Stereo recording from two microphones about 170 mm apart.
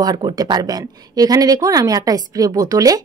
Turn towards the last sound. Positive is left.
turn(degrees=-20)  # may be behind; listen again after turning